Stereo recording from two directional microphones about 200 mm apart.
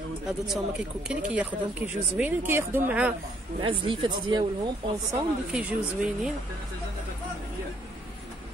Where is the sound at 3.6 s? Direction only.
25° right (ahead or behind).